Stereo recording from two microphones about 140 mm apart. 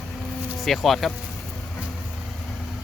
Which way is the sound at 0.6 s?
Centre (ahead or behind).